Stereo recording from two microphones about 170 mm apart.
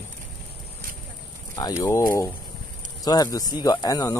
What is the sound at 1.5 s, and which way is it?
A man's voice, 20° left (ahead or behind).